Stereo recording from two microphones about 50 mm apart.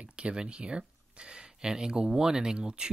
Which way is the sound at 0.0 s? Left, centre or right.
Right.